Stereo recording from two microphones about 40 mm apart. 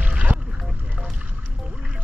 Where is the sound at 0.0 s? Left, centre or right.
Right.